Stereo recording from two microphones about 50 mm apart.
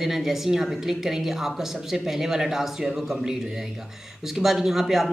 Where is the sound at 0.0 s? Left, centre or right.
Centre.